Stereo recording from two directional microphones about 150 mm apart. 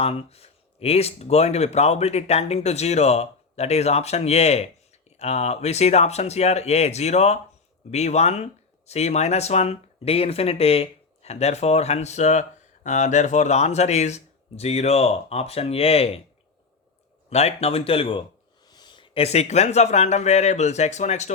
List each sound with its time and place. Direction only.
0.0 s speech: 40° left (ahead or behind)
17.2 s speech: 45° left (ahead or behind)